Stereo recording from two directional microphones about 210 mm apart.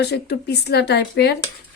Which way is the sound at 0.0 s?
50° left (ahead or behind).